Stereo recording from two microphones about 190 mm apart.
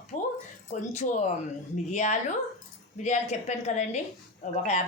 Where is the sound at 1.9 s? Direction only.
40° left (ahead or behind).